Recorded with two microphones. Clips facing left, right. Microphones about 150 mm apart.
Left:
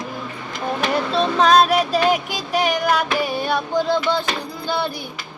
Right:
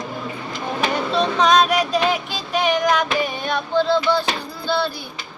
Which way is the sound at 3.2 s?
10° left (ahead or behind).